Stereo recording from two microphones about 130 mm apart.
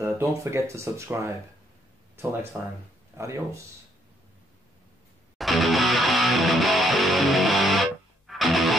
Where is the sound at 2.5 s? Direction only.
20° right (ahead or behind).